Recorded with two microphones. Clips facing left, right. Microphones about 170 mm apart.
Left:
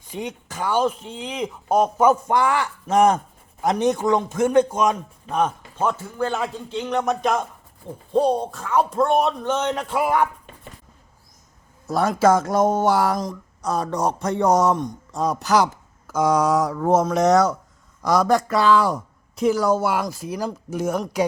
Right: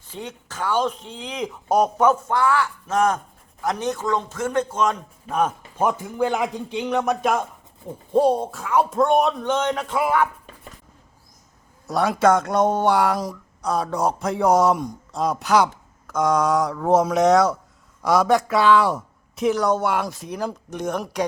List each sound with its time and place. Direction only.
0.1 s speech: 15° left (ahead or behind)
2.0 s a man's voice: 15° left (ahead or behind)
5.3 s a man's voice: 5° right (ahead or behind); by 10.2 s 10° left (ahead or behind)
11.9 s speech: centre (ahead or behind)